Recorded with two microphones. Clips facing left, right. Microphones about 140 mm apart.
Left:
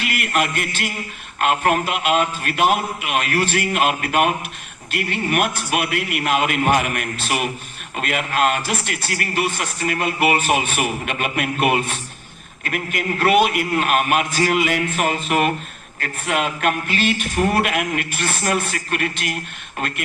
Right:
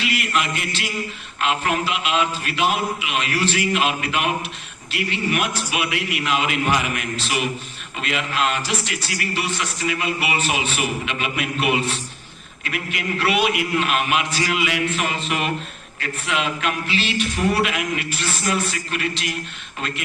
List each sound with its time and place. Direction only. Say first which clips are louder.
0.0 s speech: left 2 dB; 50° left (ahead or behind)